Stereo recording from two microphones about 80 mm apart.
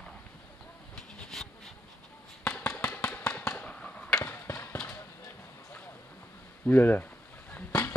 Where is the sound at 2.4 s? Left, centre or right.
Centre.